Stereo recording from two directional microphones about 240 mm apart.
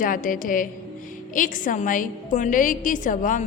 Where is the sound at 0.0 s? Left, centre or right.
Left.